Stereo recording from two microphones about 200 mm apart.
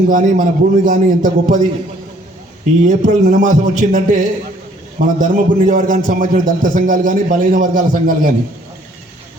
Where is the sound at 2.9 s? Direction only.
40° right (ahead or behind).